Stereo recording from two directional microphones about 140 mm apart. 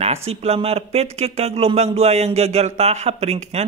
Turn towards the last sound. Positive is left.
turn(degrees=-50)  # may be behind; listen again after turning